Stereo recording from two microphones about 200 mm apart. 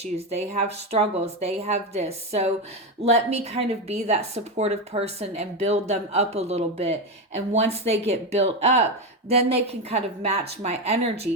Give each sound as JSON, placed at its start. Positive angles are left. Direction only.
{"t": 0.0, "sound": "a woman's voice", "side_deg": -30}